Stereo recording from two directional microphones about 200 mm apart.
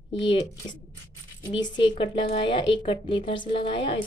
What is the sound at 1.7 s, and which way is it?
Speech, 25° left (ahead or behind).